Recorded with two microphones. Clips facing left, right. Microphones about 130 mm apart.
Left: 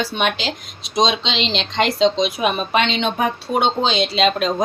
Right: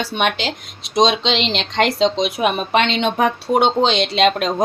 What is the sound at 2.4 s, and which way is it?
Speech, 55° right (ahead or behind).